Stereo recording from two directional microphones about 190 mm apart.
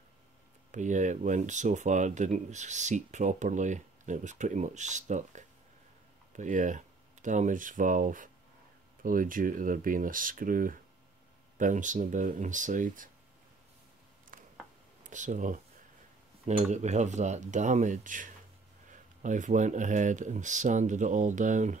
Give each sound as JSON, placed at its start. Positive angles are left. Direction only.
{"t": 0.7, "sound": "speech", "side_deg": -40}
{"t": 14.3, "sound": "a sound", "side_deg": -45}
{"t": 15.0, "sound": "speech", "side_deg": -40}